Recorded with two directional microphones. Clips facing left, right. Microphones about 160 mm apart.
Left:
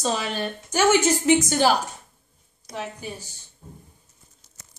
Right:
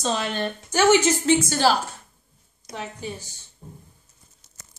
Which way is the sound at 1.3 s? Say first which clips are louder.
Left 1 dB; 15° left (ahead or behind).